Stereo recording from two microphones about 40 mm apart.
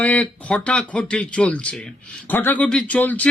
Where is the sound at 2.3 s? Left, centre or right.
Left.